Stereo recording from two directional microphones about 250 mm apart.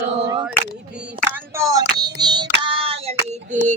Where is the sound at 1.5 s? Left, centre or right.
Centre.